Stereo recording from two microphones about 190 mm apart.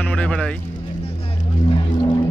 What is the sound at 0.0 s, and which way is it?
Music, 5° left (ahead or behind).